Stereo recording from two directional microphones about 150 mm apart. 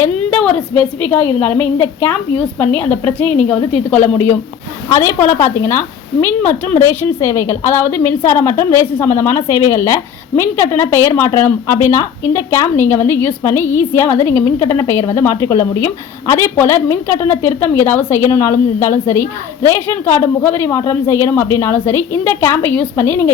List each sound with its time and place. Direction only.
0.0 s a woman's voice: 5° left (ahead or behind)